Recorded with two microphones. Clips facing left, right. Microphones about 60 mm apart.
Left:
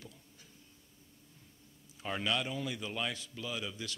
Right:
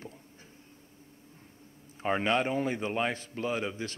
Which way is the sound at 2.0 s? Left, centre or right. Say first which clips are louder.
Right 7 dB; right.